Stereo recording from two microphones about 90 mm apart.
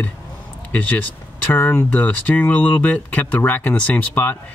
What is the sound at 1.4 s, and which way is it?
Speech, 20° left (ahead or behind).